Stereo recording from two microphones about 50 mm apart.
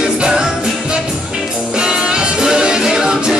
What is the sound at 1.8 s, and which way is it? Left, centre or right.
Music, centre.